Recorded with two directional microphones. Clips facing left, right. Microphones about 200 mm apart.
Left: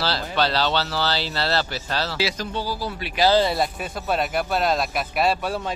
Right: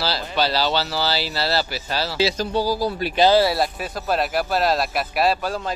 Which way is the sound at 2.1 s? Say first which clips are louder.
Right 5 dB; 30° right (ahead or behind).